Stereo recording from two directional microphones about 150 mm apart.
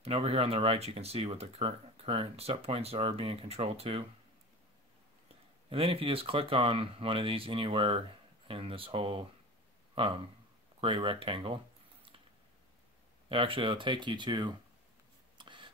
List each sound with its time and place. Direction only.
0.0 s speech: 40° right (ahead or behind)
5.7 s speech: 40° right (ahead or behind)
10.8 s a sound: 35° right (ahead or behind)
13.3 s speech: 35° right (ahead or behind)
15.3 s writing: 35° right (ahead or behind)